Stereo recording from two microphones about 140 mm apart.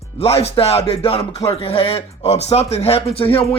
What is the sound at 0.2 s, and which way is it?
Speech, 45° left (ahead or behind).